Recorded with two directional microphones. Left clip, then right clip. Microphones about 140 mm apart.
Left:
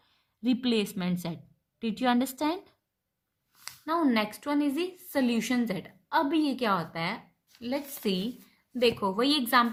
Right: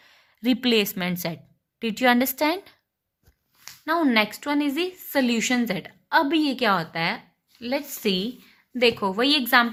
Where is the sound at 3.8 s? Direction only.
25° right (ahead or behind).